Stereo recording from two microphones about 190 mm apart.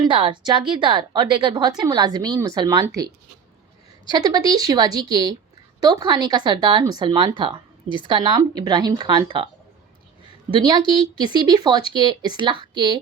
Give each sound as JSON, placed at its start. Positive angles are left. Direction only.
{"t": 0.0, "sound": "speech", "side_deg": -25}
{"t": 4.1, "sound": "speech", "side_deg": -20}
{"t": 10.6, "sound": "speech", "side_deg": -25}